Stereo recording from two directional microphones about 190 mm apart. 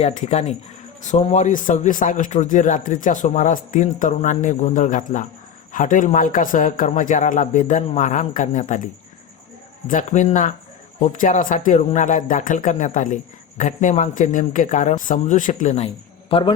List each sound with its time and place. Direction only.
0.0 s a man's voice: 35° left (ahead or behind)